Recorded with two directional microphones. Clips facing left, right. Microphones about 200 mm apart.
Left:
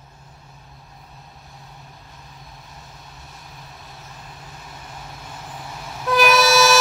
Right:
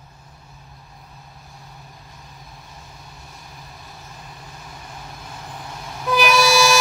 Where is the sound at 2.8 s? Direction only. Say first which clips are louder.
Even; centre (ahead or behind).